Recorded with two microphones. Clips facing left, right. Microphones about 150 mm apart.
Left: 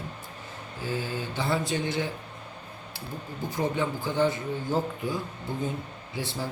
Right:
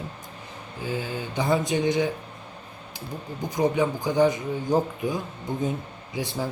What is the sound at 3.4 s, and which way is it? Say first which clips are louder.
Speech: right 5 dB; 15° right (ahead or behind).